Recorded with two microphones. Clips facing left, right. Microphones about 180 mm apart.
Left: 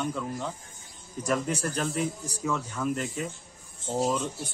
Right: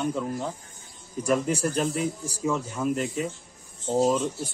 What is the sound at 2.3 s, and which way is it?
Speech, 30° right (ahead or behind).